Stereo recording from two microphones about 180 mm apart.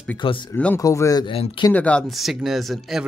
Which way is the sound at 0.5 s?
10° left (ahead or behind).